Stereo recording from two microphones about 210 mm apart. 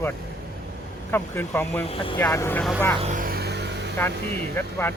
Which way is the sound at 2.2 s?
10° left (ahead or behind).